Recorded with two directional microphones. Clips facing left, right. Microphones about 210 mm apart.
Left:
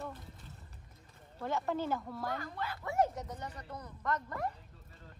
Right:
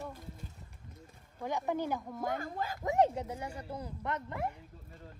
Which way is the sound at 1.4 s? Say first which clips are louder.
Right 1 dB; 15° right (ahead or behind).